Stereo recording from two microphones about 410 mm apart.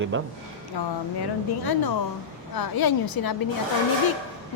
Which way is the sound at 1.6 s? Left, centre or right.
Left.